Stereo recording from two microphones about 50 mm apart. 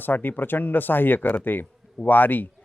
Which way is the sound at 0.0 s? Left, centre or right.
Left.